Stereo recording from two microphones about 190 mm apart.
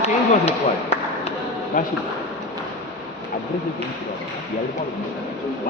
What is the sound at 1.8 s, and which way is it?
Speech, 45° left (ahead or behind).